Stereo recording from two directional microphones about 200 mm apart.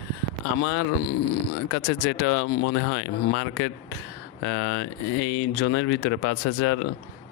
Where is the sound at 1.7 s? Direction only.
65° left (ahead or behind); by 6.7 s 90° left.